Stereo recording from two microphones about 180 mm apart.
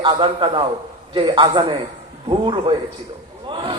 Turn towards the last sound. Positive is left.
turn(degrees=-25)  # may be behind; listen again after turning